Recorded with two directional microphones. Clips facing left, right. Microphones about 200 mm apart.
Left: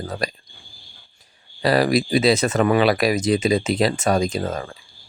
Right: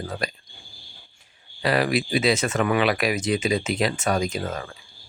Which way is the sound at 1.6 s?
35° left (ahead or behind).